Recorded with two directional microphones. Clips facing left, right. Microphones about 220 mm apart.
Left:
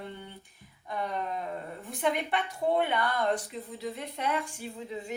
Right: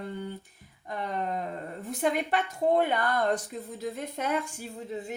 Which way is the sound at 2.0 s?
45° right (ahead or behind).